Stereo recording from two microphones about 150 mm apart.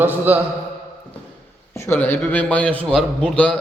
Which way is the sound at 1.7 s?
15° left (ahead or behind).